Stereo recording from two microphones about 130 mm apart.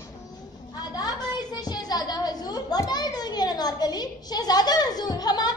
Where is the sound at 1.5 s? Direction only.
30° left (ahead or behind).